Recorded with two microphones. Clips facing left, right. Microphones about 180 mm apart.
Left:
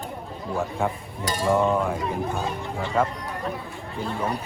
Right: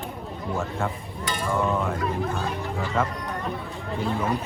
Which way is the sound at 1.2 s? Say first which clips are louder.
Left 5 dB; 35° left (ahead or behind).